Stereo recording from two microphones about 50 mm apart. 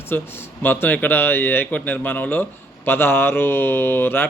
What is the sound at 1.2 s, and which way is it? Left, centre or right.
A man's voice, left.